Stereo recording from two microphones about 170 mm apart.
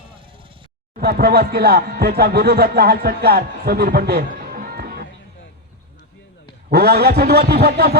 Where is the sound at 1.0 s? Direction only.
65° right (ahead or behind).